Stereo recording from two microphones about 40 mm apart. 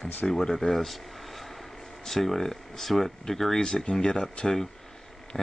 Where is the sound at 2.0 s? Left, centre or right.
Centre.